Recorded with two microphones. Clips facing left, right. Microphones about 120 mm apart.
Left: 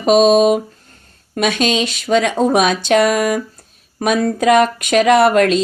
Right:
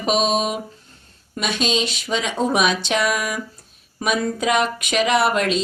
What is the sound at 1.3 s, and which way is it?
A woman's voice, 65° left (ahead or behind).